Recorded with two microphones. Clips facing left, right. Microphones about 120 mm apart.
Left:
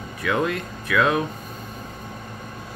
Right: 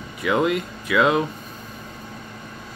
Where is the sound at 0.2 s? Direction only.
10° right (ahead or behind).